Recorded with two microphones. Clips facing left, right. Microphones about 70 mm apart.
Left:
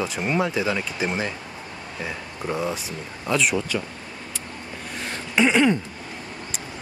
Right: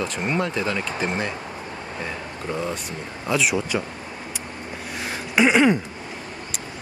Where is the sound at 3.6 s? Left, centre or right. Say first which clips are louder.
Right 2 dB; centre.